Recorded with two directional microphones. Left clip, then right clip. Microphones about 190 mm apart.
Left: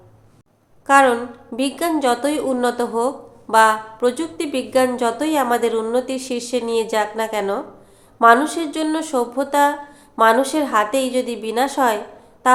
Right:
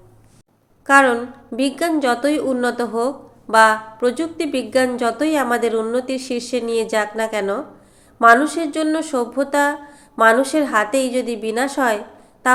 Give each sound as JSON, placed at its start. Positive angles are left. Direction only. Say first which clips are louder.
{"t": 0.9, "sound": "a woman's voice", "louder": "even", "side_deg": -5}